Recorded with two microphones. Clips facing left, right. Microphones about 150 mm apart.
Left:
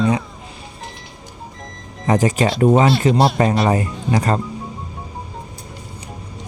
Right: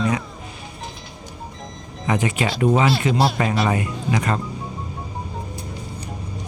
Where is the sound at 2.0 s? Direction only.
40° left (ahead or behind).